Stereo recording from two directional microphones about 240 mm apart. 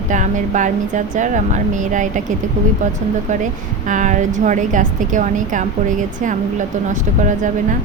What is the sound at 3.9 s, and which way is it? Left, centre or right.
A woman's voice, right.